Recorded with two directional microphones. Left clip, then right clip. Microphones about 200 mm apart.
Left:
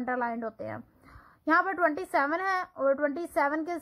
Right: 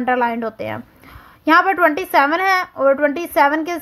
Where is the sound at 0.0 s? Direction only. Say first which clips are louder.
Right 13 dB; 30° right (ahead or behind).